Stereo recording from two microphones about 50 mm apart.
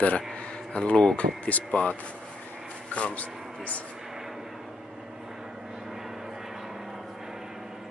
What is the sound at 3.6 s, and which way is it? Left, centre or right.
Speech, left.